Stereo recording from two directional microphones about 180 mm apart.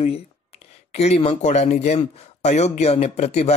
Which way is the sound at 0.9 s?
35° left (ahead or behind).